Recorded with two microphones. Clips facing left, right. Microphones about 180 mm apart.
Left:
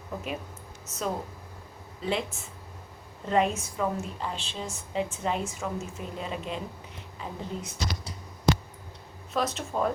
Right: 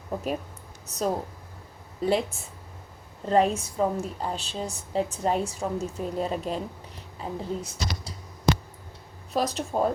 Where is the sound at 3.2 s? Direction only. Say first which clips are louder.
Right 3 dB; 35° right (ahead or behind).